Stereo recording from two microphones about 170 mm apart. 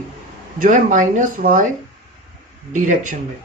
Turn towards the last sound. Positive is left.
turn(degrees=-50)  # may be behind; listen again after turning